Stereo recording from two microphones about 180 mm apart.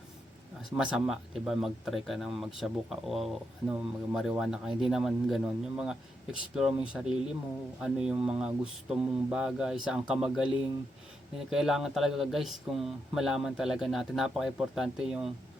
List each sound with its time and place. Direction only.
0.8 s speech: 5° right (ahead or behind)
11.5 s speech: centre (ahead or behind)